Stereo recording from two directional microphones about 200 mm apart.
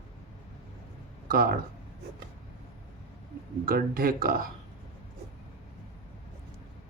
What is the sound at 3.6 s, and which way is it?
Speech, 50° right (ahead or behind).